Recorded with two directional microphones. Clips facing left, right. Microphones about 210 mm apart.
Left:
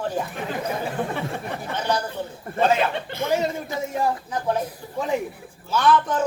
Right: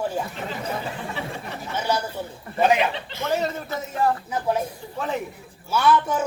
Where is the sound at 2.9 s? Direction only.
55° left (ahead or behind).